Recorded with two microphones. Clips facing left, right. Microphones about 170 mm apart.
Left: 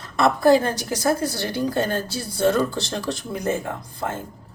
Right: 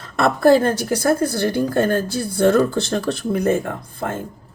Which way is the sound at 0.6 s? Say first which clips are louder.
Right 5 dB; 55° right (ahead or behind).